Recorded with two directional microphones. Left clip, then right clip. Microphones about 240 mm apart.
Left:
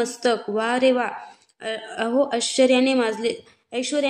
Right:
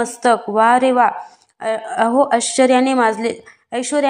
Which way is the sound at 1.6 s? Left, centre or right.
Centre.